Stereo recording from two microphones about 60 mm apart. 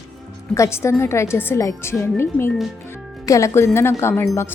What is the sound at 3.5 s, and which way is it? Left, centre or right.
Speech, left.